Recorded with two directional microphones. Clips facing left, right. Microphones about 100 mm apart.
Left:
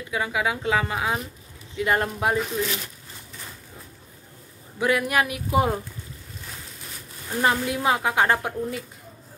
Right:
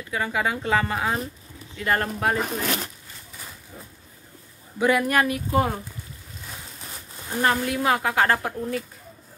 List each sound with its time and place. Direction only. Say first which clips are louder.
0.1 s a woman's voice: even; 5° left (ahead or behind)
2.3 s speech: even; 55° right (ahead or behind)
4.7 s a woman's voice: right 2 dB; centre (ahead or behind)
7.4 s a woman's voice: even; 15° left (ahead or behind)